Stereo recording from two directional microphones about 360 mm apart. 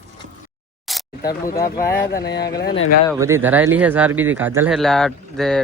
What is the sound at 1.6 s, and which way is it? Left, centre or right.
Speech, centre.